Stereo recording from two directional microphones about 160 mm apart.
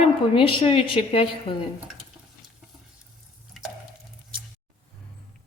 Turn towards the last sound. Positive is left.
turn(degrees=0)  # may be behind; listen again after turning